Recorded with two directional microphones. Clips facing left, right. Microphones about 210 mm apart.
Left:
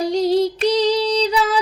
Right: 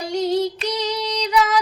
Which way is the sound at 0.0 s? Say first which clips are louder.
Left 4 dB; 35° left (ahead or behind).